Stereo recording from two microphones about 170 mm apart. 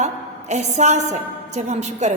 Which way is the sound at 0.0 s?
45° right (ahead or behind).